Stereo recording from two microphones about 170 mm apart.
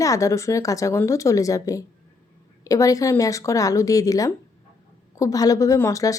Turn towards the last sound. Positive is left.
turn(degrees=20)  # may be behind; listen again after turning